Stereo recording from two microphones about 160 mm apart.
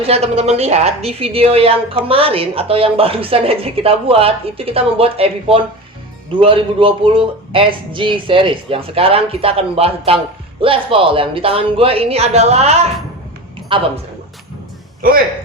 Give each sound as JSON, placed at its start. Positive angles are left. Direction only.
{"t": 0.0, "sound": "a woman's voice", "side_deg": -40}
{"t": 13.7, "sound": "a woman's voice", "side_deg": -30}